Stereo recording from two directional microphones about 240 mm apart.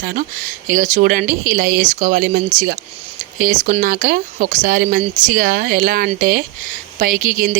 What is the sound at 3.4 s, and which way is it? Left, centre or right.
Speech, right.